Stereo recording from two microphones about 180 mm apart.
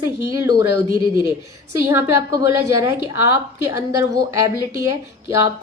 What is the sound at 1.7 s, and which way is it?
A woman's voice, 15° right (ahead or behind).